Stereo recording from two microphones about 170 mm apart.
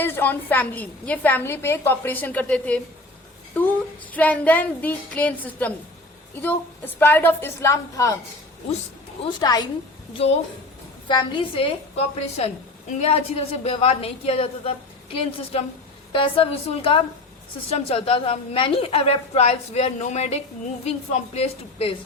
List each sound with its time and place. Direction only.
0.0 s a woman's voice: 10° left (ahead or behind)
9.2 s a woman's voice: 25° left (ahead or behind)
11.1 s a woman's voice: 35° left (ahead or behind)